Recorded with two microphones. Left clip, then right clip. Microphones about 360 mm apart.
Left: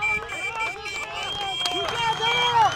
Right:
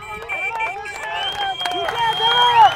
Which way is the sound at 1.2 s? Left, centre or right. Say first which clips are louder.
Right 6 dB; right.